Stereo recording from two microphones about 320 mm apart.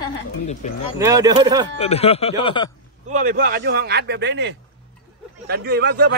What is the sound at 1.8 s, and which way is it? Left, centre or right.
Speech, centre.